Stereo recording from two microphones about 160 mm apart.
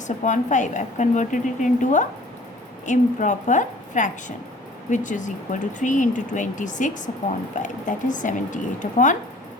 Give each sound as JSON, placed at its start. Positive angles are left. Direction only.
{"t": 0.3, "sound": "speech", "side_deg": 50}